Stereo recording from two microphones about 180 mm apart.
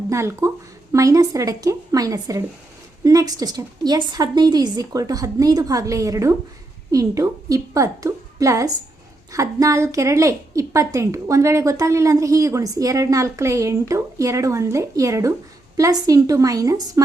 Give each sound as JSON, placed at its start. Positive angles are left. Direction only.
{"t": 0.1, "sound": "a woman's voice", "side_deg": -15}